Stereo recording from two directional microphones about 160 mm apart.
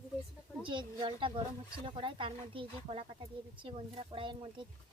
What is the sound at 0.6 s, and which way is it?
Speech, 30° right (ahead or behind).